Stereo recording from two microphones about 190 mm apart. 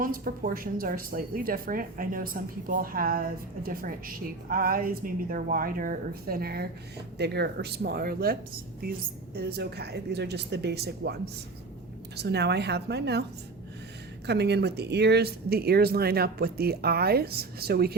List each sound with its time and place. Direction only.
0.0 s speech: 50° right (ahead or behind)
14.3 s speech: 60° right (ahead or behind)